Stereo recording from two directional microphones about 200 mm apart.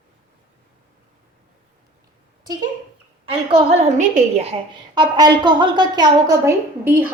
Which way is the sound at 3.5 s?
30° right (ahead or behind).